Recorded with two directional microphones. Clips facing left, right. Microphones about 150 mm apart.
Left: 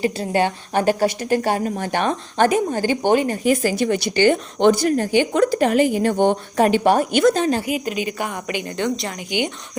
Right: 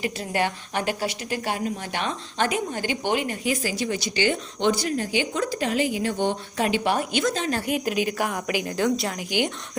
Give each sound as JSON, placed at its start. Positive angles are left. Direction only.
{"t": 0.0, "sound": "a woman's voice", "side_deg": 30}
{"t": 0.7, "sound": "speech", "side_deg": 40}
{"t": 7.6, "sound": "a woman's voice", "side_deg": 0}